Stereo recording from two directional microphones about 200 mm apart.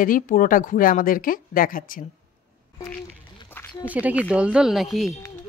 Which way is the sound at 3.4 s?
10° left (ahead or behind).